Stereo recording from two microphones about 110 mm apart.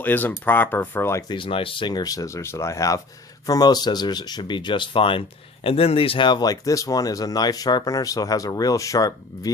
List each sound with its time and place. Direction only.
0.0 s speech: 15° left (ahead or behind)
1.3 s speech: 50° left (ahead or behind); by 9.5 s 35° left (ahead or behind)